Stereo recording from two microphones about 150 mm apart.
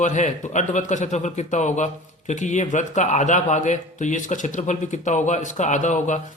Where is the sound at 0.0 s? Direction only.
55° left (ahead or behind).